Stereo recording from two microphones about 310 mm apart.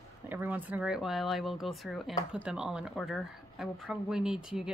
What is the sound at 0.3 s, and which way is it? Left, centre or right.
Speech, centre.